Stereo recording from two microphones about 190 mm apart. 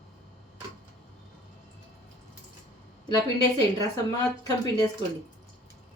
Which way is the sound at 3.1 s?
20° left (ahead or behind).